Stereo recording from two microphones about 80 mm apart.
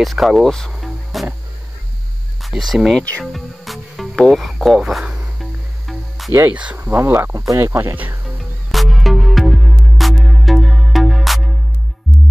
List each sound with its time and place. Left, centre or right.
0.0 s speech: centre
2.4 s speech: centre
3.0 s speech: centre
3.3 s music: centre
6.5 s speech: centre
6.9 s speech: right
8.7 s music: centre